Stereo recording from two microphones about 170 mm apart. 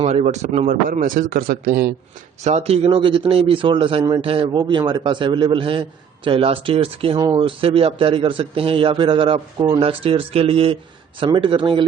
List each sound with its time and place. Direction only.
0.0 s a man's voice: 40° right (ahead or behind); by 1.9 s 60° right (ahead or behind)
2.4 s a man's voice: 40° right (ahead or behind)